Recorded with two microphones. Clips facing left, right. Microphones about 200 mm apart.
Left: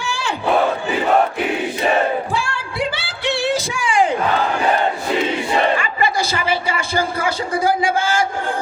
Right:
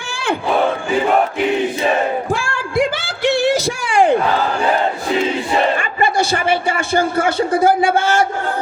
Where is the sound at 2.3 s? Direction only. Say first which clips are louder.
Right 5 dB; 45° right (ahead or behind).